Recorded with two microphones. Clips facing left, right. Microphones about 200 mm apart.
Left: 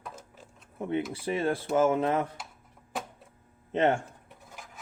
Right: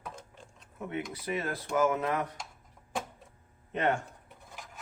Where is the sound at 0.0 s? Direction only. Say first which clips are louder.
Even; 5° left (ahead or behind).